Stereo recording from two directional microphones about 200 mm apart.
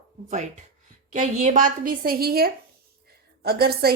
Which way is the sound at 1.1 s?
35° right (ahead or behind).